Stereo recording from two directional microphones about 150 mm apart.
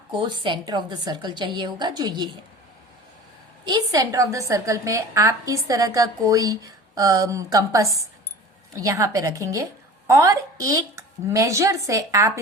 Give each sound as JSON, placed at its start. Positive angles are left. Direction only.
{"t": 0.4, "sound": "a woman's voice", "side_deg": -30}
{"t": 3.7, "sound": "a woman's voice", "side_deg": -20}